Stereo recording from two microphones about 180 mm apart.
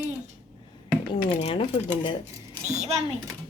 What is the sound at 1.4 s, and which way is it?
Speech, 30° left (ahead or behind).